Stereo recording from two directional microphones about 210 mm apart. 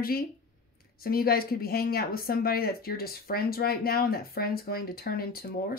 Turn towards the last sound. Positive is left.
turn(degrees=45)  # may be behind; listen again after turning